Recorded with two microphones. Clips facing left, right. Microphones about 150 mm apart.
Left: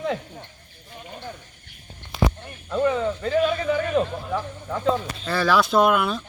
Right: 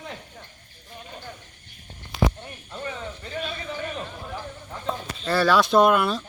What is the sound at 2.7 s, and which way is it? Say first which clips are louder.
A man's voice: left 13 dB; 85° left.